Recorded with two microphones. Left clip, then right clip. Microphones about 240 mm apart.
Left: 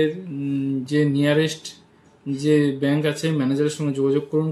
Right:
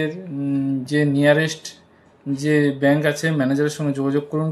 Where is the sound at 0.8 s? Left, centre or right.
Centre.